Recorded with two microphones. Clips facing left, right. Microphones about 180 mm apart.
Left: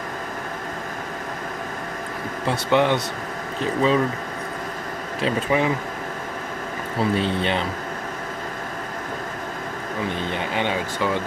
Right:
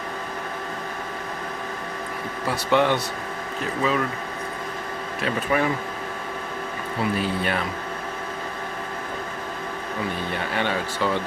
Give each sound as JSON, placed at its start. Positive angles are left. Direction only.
{"t": 2.5, "sound": "speech", "side_deg": 15}
{"t": 3.6, "sound": "speech", "side_deg": 30}
{"t": 5.2, "sound": "speech", "side_deg": 20}
{"t": 7.0, "sound": "speech", "side_deg": 25}
{"t": 10.5, "sound": "speech", "side_deg": 15}